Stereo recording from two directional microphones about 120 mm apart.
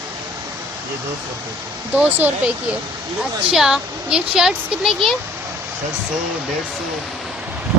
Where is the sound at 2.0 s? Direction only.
15° right (ahead or behind).